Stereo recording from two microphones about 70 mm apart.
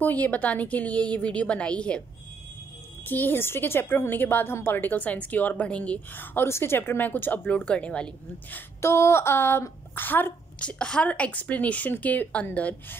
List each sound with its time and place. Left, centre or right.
0.0 s a woman's voice: left
3.1 s a woman's voice: left
6.1 s a woman's voice: left; by 8.5 s centre
8.8 s speech: left
10.6 s a woman's voice: centre